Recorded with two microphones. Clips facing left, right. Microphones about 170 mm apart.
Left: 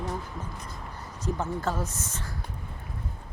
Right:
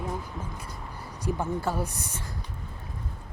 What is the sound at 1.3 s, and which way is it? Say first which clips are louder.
Speech: right 1 dB; 10° right (ahead or behind).